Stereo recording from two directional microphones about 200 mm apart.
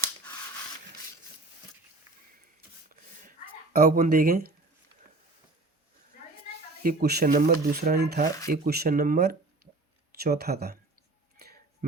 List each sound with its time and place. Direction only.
2.9 s a sound: 45° right (ahead or behind)
6.8 s speech: 55° right (ahead or behind)
11.8 s speech: 40° right (ahead or behind)